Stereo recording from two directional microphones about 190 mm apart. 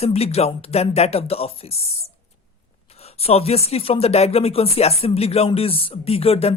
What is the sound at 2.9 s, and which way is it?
Speech, 30° left (ahead or behind).